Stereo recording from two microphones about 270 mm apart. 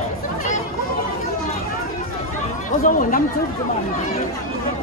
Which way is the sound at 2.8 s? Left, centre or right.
Left.